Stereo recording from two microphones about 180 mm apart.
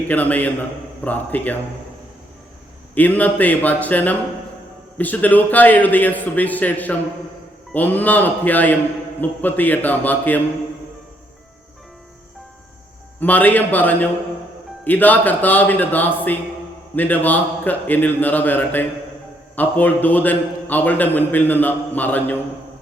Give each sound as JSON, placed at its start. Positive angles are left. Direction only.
{"t": 0.1, "sound": "a man's voice", "side_deg": 10}
{"t": 2.9, "sound": "a man's voice", "side_deg": 10}
{"t": 13.1, "sound": "a man's voice", "side_deg": 10}